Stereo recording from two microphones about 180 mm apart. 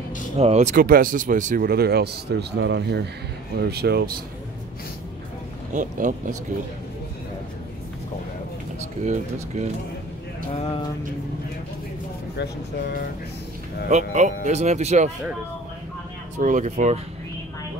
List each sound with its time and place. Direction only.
0.4 s speech: 35° right (ahead or behind); by 4.1 s 65° right (ahead or behind)
5.7 s speech: 45° right (ahead or behind)
9.0 s speech: 40° right (ahead or behind)
10.5 s a sound: 35° left (ahead or behind)
13.8 s speech: 40° right (ahead or behind)
16.3 s speech: 45° right (ahead or behind)